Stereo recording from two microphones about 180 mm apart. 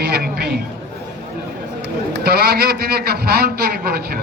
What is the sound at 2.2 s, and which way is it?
A man's voice, 60° right (ahead or behind).